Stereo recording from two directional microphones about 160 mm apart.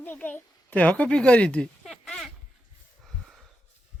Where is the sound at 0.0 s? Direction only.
10° left (ahead or behind).